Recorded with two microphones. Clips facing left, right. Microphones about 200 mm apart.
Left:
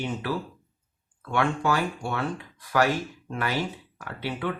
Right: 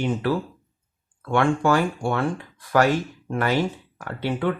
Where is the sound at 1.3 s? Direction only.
50° right (ahead or behind).